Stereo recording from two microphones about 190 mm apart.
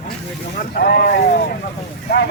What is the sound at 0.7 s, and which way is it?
Speech, 55° left (ahead or behind).